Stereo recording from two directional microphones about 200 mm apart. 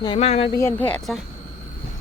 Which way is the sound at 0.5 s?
10° left (ahead or behind).